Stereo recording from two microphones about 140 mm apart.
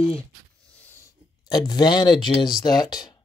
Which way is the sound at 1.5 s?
30° left (ahead or behind).